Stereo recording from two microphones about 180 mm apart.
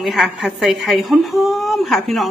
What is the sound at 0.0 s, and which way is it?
A woman's voice, centre (ahead or behind).